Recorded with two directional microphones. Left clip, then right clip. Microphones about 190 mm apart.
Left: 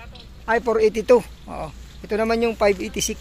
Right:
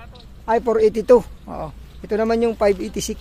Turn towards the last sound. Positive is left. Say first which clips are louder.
# right 1 dB
turn(degrees=-20)  # may be behind; listen again after turning